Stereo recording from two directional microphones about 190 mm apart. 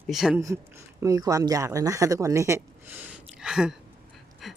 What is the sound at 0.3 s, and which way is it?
Speech, 15° right (ahead or behind).